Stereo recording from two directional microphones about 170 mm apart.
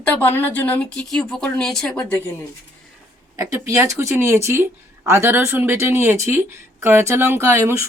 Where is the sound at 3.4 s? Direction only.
15° right (ahead or behind).